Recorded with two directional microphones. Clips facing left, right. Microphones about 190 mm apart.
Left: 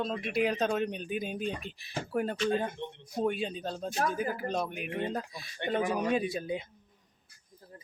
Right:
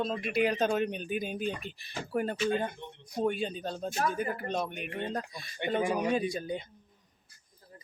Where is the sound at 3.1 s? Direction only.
Centre (ahead or behind).